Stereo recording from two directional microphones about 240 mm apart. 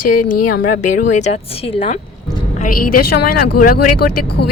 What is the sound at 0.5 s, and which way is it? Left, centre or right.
Speech, left.